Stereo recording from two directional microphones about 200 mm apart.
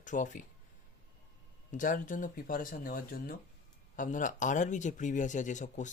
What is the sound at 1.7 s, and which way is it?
Speech, 40° left (ahead or behind).